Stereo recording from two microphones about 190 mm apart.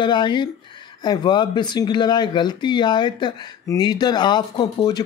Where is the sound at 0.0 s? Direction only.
25° left (ahead or behind).